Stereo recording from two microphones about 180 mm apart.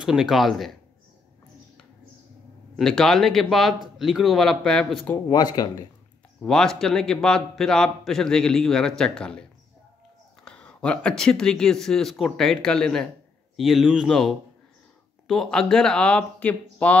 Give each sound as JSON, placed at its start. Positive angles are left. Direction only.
{"t": 0.0, "sound": "a man's voice", "side_deg": 0}
{"t": 2.7, "sound": "a man's voice", "side_deg": 5}
{"t": 5.3, "sound": "speech", "side_deg": 25}
{"t": 6.4, "sound": "a man's voice", "side_deg": 5}
{"t": 10.4, "sound": "a man's voice", "side_deg": 5}